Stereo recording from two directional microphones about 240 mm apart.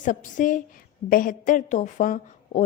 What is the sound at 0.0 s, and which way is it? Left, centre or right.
A woman's voice, left.